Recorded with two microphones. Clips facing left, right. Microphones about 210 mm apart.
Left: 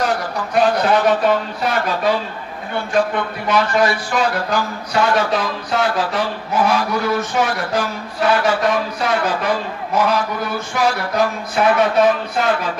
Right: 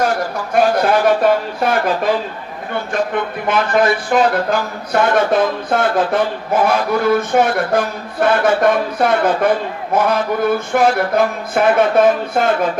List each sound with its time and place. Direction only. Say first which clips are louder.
0.0 s speech: right 2 dB; 50° right (ahead or behind)
3.4 s speech: right 1 dB; 50° right (ahead or behind)